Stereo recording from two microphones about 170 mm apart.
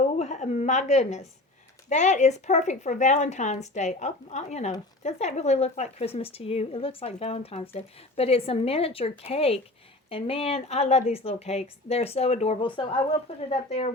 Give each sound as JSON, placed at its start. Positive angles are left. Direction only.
{"t": 0.2, "sound": "a sound", "side_deg": 40}
{"t": 1.9, "sound": "a woman's voice", "side_deg": 45}
{"t": 13.5, "sound": "a woman's voice", "side_deg": 40}